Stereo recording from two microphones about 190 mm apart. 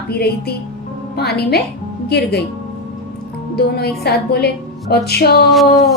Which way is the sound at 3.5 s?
55° left (ahead or behind).